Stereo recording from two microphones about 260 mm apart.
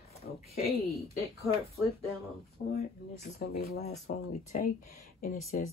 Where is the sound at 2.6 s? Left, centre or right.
Left.